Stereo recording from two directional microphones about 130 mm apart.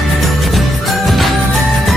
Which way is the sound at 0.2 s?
Centre (ahead or behind).